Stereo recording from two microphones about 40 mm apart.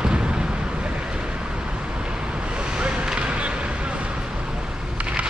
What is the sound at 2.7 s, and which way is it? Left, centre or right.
Vehicle, right.